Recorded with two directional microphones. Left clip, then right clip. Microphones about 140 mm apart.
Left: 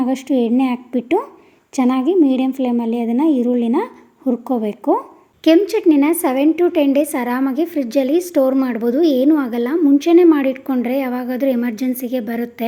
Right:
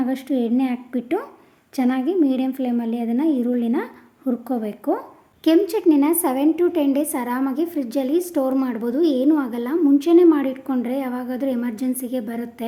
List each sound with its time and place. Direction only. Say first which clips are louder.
0.0 s a woman's voice: left 5 dB; 25° left (ahead or behind)